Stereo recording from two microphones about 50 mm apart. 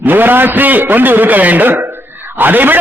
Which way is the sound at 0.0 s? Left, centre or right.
Right.